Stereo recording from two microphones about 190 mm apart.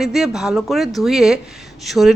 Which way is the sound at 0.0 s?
Centre (ahead or behind).